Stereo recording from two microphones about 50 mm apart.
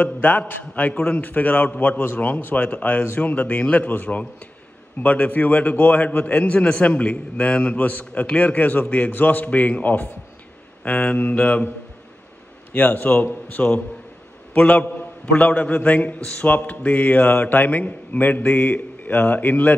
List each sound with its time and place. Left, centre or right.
0.0 s a man's voice: left
3.9 s a man's voice: left
5.0 s a man's voice: left
12.7 s a man's voice: left